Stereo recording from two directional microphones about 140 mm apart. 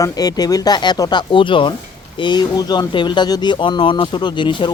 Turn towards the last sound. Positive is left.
turn(degrees=35)  # may be behind; listen again after turning